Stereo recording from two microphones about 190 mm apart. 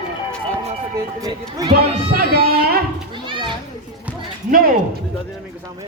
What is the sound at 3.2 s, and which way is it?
Children playing, 25° right (ahead or behind).